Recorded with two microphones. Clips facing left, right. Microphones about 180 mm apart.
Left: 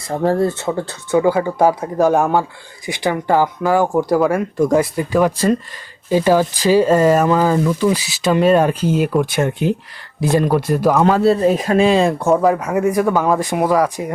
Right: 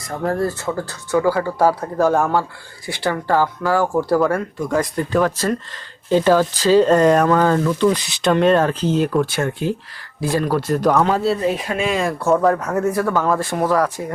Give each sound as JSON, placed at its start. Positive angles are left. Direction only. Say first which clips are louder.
{"t": 0.1, "sound": "speech", "louder": "left 4 dB", "side_deg": 30}
{"t": 11.3, "sound": "speech", "louder": "left 6 dB", "side_deg": 40}